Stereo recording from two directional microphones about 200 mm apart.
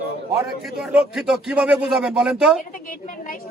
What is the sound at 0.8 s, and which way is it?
A man's voice, 5° right (ahead or behind).